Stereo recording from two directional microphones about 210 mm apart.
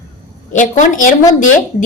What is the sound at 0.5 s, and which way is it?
Speech, 35° left (ahead or behind).